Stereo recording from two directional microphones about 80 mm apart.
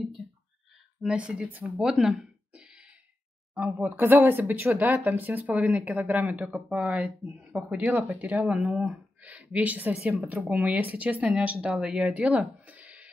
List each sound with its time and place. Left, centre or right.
1.0 s speech: centre
1.8 s a sound: centre
3.5 s speech: right
8.5 s speech: centre
9.2 s speech: centre